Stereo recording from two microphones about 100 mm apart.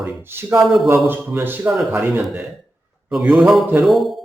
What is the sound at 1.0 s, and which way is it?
Speech, 20° right (ahead or behind).